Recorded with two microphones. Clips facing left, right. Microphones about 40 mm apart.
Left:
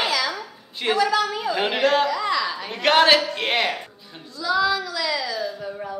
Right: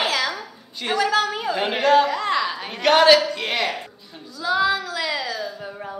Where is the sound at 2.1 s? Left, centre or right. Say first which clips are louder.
Right 1 dB; right.